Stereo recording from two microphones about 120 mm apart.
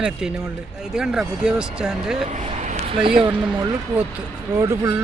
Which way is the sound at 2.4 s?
75° right (ahead or behind).